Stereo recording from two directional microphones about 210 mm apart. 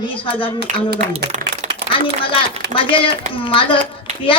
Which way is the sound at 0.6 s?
50° right (ahead or behind).